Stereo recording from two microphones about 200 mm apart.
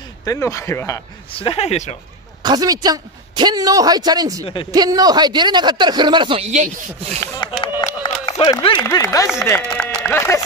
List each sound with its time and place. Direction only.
0.2 s speech: 15° left (ahead or behind)
1.3 s speech: 25° left (ahead or behind)
2.4 s a man's voice: 20° right (ahead or behind)
7.6 s a sound: 25° left (ahead or behind)
8.8 s speech: 15° left (ahead or behind)